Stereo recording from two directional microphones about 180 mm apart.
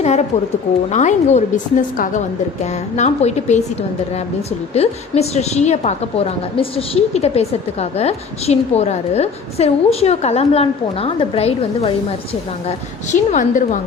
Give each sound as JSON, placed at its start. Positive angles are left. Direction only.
{"t": 0.0, "sound": "a woman's voice", "side_deg": 35}
{"t": 4.7, "sound": "a woman's voice", "side_deg": 35}